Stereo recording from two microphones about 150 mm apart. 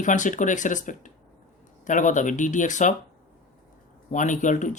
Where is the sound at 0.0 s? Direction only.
55° left (ahead or behind).